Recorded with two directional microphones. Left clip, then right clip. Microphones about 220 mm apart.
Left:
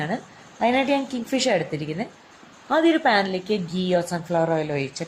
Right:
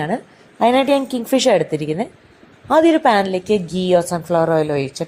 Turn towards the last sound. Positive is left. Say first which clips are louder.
# right 7 dB
turn(degrees=-35)  # may be behind; listen again after turning